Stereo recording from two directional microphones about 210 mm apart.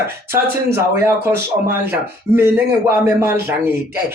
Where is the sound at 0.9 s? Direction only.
10° right (ahead or behind).